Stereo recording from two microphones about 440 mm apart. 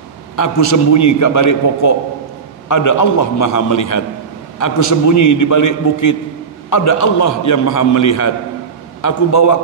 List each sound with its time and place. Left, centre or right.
0.9 s a man's voice: left